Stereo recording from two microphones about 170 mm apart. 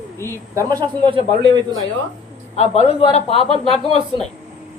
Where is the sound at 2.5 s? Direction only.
40° left (ahead or behind).